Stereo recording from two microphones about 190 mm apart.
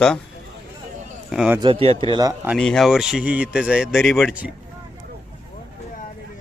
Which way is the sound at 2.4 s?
5° left (ahead or behind).